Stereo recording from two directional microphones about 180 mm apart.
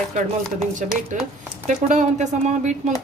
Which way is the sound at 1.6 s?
45° right (ahead or behind).